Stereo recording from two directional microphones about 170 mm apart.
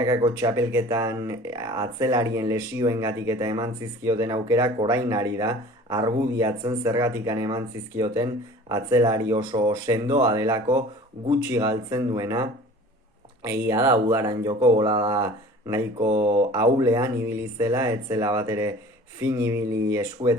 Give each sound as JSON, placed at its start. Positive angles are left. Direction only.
{"t": 0.3, "sound": "speech", "side_deg": -15}